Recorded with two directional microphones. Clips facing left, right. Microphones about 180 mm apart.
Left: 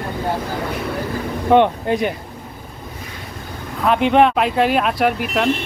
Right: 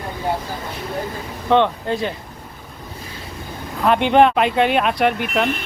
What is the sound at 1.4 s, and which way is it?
Speech, 15° left (ahead or behind).